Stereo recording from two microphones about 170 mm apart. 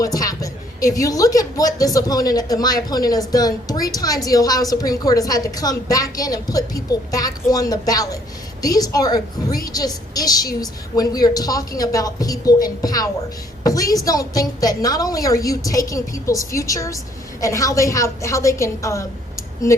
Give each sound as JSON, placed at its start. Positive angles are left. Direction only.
{"t": 0.0, "sound": "a woman's voice", "side_deg": 20}